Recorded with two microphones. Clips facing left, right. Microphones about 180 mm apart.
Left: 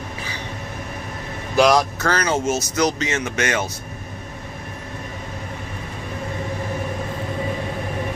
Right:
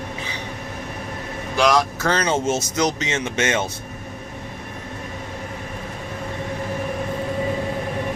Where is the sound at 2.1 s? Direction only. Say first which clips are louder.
Even; 25° right (ahead or behind).